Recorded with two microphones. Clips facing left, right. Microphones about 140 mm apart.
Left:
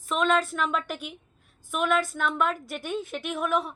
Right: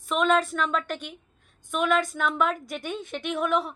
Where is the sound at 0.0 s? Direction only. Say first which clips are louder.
Right 1 dB; centre (ahead or behind).